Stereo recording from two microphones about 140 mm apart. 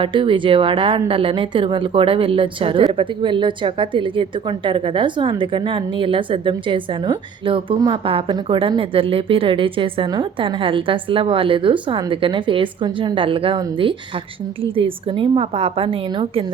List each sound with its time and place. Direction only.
0.0 s a woman's voice: 35° right (ahead or behind)
14.8 s a woman's voice: 40° right (ahead or behind)